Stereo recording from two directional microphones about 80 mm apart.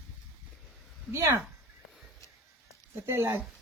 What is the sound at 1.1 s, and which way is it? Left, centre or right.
Speech, right.